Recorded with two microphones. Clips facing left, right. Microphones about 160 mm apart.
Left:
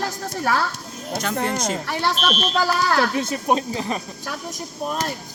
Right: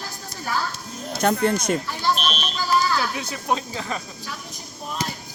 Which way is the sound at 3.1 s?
50° left (ahead or behind).